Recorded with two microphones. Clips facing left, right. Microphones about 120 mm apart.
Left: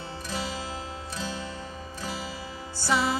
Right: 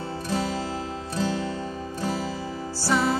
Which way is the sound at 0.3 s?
50° right (ahead or behind).